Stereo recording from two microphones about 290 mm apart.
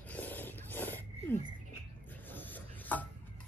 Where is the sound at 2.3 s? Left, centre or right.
Centre.